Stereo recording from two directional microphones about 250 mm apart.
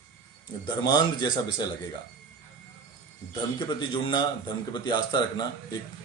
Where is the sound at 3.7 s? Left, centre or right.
Centre.